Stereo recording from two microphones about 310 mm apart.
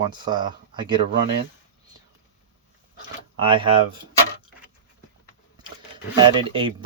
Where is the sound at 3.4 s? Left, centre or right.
Centre.